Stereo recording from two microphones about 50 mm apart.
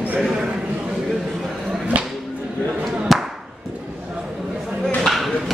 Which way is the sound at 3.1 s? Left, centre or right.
Centre.